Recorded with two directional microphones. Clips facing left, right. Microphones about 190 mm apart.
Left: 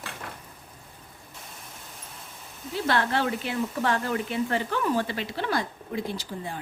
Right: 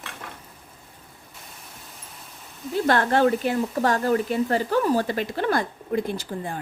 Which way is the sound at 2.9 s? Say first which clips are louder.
Right 6 dB; 45° right (ahead or behind).